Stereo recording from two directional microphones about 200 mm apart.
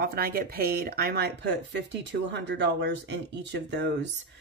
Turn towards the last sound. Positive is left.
turn(degrees=-60)  # may be behind; listen again after turning